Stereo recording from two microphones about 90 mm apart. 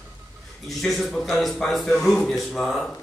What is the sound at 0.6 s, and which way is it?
Speech, centre (ahead or behind).